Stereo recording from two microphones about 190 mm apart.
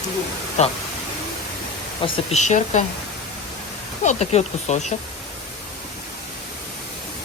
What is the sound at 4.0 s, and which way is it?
Speech, 35° left (ahead or behind).